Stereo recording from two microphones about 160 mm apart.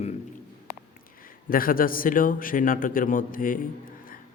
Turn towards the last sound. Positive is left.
turn(degrees=60)  # may be behind; listen again after turning